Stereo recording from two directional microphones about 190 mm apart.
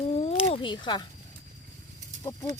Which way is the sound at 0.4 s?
30° left (ahead or behind).